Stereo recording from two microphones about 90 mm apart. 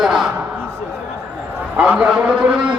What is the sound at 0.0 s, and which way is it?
Speech, 5° right (ahead or behind).